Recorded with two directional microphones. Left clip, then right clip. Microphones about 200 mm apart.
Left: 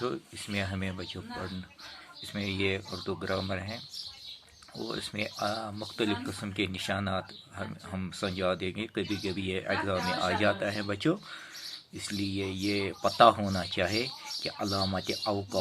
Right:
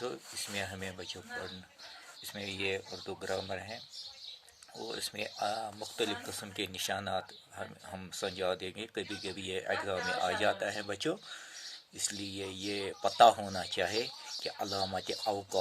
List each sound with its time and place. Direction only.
0.0 s speech: 25° right (ahead or behind)
2.3 s speech: 30° right (ahead or behind)
4.9 s speech: 25° right (ahead or behind)